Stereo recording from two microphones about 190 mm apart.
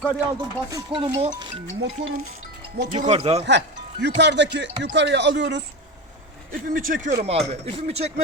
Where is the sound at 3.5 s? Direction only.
65° right (ahead or behind).